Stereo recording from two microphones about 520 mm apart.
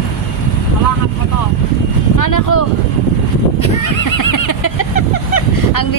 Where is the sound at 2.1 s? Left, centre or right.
Left.